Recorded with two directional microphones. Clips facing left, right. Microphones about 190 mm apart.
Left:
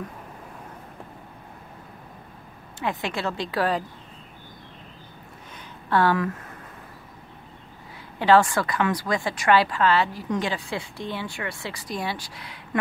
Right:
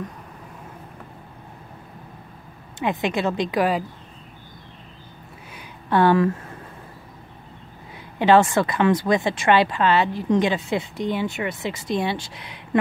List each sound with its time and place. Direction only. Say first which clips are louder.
2.8 s a woman's voice: right 5 dB; 20° right (ahead or behind)
5.5 s a sound: right 2 dB; 15° right (ahead or behind)
8.2 s a woman's voice: right 3 dB; 20° right (ahead or behind)